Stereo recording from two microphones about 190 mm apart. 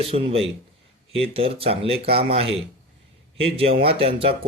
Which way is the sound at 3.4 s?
30° right (ahead or behind).